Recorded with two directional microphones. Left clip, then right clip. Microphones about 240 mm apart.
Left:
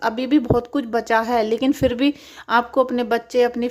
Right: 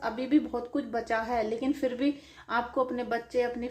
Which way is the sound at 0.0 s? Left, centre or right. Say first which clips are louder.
Left 8 dB; left.